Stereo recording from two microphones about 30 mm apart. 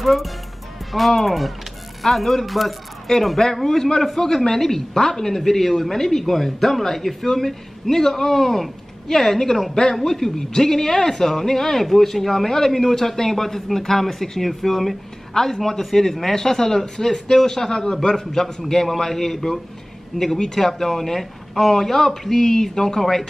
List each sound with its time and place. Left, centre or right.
0.0 s speech: centre
3.1 s speech: left